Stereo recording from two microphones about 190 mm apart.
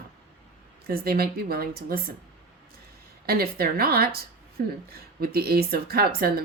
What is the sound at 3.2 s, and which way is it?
Speech, 55° right (ahead or behind).